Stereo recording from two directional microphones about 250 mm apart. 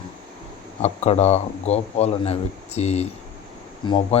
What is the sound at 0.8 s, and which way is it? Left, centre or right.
Speech, left.